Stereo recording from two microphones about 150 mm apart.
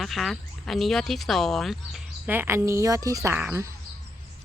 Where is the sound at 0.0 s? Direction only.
Centre (ahead or behind).